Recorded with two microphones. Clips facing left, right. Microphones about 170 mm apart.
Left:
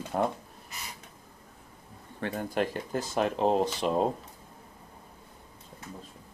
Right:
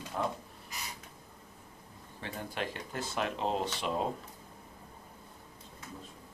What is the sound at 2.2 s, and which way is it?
Speech, 50° left (ahead or behind).